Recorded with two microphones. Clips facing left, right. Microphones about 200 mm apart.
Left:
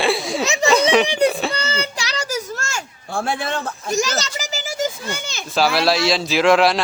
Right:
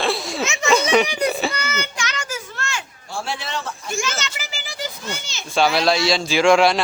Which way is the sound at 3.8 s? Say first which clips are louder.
Left 7 dB; 40° left (ahead or behind).